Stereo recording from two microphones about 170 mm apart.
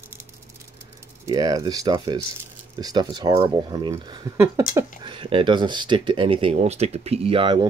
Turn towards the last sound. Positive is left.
turn(degrees=-30)  # may be behind; listen again after turning